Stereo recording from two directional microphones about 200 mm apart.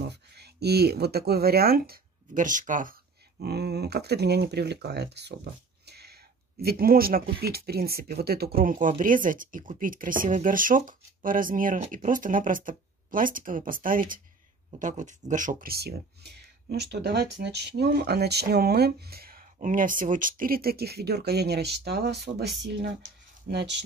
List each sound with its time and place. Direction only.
0.1 s speech: 55° right (ahead or behind)
5.9 s a sound: 55° right (ahead or behind)
6.6 s speech: 50° right (ahead or behind)